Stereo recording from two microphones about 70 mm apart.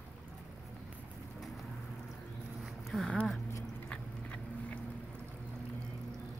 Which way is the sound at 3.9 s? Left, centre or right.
Centre.